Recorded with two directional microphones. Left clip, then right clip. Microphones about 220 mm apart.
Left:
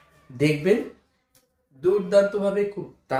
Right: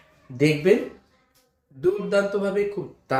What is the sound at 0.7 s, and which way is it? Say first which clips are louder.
Speech: right 2 dB; centre (ahead or behind).